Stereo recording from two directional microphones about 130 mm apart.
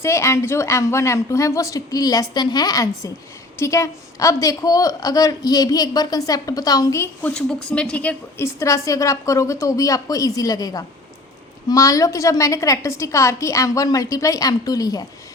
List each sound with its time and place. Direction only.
0.0 s a woman's voice: 20° left (ahead or behind)
8.5 s a woman's voice: 25° left (ahead or behind)